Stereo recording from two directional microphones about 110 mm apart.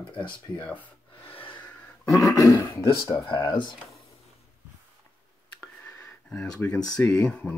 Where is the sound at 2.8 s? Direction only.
25° left (ahead or behind).